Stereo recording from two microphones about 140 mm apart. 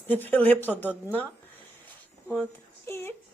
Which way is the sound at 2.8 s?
20° left (ahead or behind).